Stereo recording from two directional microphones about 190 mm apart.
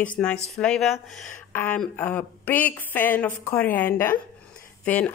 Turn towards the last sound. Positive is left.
turn(degrees=5)  # may be behind; listen again after turning